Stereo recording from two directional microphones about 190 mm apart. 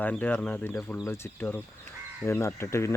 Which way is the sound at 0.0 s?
10° left (ahead or behind).